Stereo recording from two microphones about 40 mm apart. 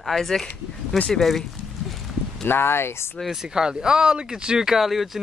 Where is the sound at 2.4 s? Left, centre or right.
Left.